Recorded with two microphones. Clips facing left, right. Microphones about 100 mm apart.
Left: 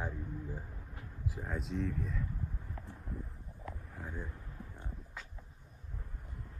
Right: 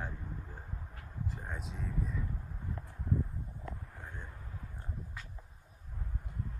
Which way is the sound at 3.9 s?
5° left (ahead or behind).